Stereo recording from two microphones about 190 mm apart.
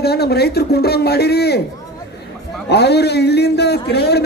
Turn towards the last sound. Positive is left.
turn(degrees=60)  # may be behind; listen again after turning